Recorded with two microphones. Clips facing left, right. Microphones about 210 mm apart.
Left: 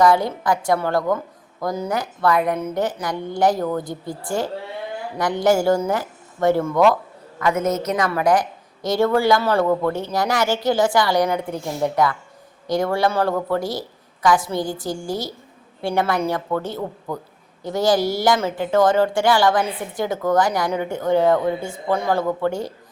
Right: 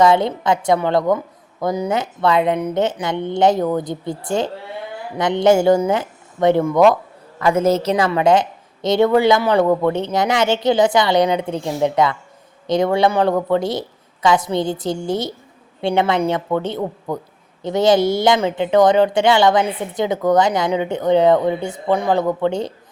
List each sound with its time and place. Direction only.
0.0 s a woman's voice: 20° right (ahead or behind)
7.3 s a woman's voice: 30° right (ahead or behind)